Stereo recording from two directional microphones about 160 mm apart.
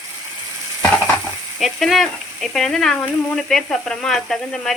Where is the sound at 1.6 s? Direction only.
Centre (ahead or behind).